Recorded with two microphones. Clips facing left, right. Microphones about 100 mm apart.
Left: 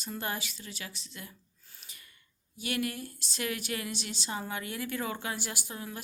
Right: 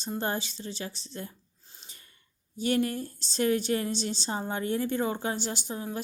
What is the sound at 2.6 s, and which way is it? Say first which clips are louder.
A woman's voice: right 7 dB; 30° right (ahead or behind).